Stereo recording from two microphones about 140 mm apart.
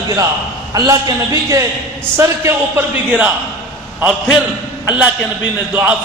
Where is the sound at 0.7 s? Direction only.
25° right (ahead or behind).